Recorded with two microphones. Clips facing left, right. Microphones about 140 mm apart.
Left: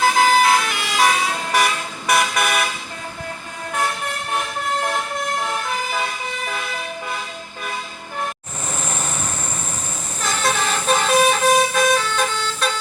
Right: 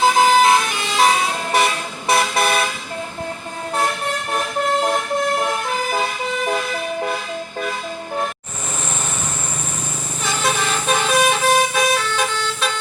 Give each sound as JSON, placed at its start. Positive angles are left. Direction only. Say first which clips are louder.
{"t": 0.0, "sound": "vehicle", "louder": "right 2 dB", "side_deg": -20}
{"t": 10.2, "sound": "vehicle", "louder": "even", "side_deg": 0}